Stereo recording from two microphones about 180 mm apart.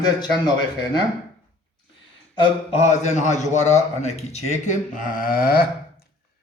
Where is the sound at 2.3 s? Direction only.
30° left (ahead or behind); by 5.6 s 55° left (ahead or behind).